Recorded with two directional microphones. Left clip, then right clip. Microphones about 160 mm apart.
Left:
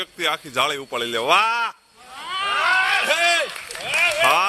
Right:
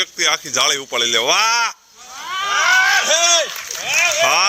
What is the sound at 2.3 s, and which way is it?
Run, 5° right (ahead or behind).